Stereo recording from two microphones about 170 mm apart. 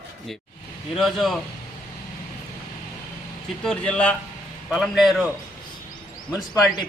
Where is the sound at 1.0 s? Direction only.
Centre (ahead or behind).